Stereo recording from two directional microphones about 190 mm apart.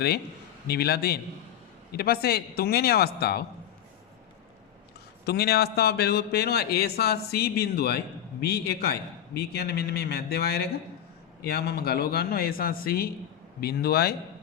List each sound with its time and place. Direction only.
0.7 s a man's voice: 55° left (ahead or behind)
5.2 s a man's voice: 55° left (ahead or behind)